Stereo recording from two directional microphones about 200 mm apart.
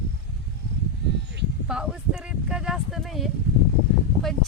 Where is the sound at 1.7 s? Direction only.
5° right (ahead or behind).